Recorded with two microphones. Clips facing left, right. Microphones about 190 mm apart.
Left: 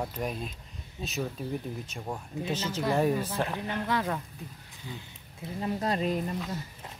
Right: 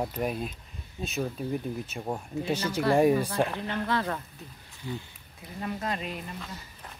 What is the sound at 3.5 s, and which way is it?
Speech, 15° left (ahead or behind).